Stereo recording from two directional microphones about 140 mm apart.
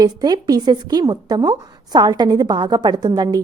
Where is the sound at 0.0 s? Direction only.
30° right (ahead or behind).